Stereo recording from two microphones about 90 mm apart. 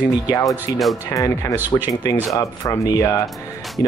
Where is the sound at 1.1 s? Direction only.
40° left (ahead or behind).